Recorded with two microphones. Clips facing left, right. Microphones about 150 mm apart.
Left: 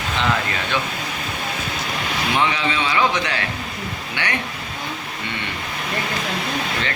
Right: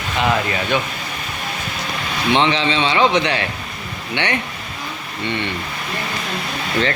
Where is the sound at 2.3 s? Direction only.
25° right (ahead or behind).